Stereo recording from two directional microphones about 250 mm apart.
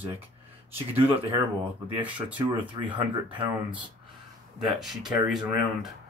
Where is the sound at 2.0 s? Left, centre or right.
Centre.